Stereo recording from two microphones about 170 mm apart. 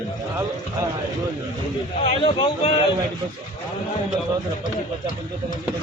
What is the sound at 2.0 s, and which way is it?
Speech, 30° left (ahead or behind).